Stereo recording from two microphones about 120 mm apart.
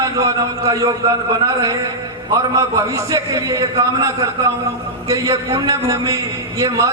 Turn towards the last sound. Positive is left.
turn(degrees=-30)  # may be behind; listen again after turning